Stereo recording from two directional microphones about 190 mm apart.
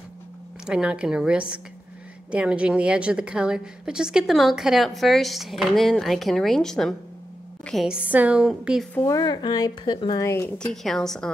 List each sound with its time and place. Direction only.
0.7 s a woman's voice: 5° right (ahead or behind)
8.9 s speech: 15° left (ahead or behind)
10.7 s a woman's voice: centre (ahead or behind)